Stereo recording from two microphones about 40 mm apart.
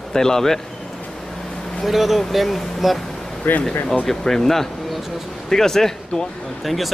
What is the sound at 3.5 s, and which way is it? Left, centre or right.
Speech, left.